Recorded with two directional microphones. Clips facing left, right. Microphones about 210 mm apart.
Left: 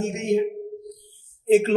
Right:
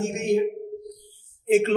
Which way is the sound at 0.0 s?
20° left (ahead or behind).